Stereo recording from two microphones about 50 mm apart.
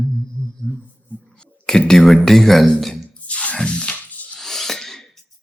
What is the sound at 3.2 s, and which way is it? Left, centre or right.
Music, left.